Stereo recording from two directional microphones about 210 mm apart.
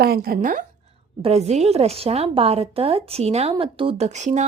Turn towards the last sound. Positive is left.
turn(degrees=-35)  # may be behind; listen again after turning